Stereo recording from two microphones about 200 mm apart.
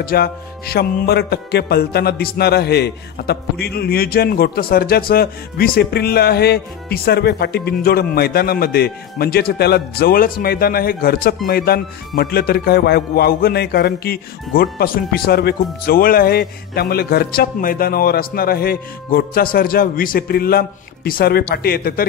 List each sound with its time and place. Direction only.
0.0 s speech: 50° left (ahead or behind)